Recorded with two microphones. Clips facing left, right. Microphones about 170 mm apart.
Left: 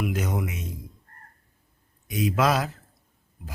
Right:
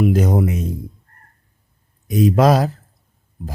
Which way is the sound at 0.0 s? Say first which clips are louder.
Right 11 dB; 35° right (ahead or behind).